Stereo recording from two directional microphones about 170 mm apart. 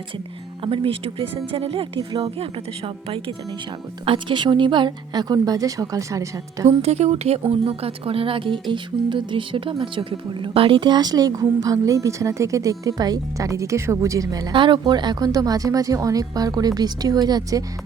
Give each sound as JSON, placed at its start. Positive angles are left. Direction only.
{"t": 0.6, "sound": "speech", "side_deg": -30}
{"t": 6.7, "sound": "speech", "side_deg": -40}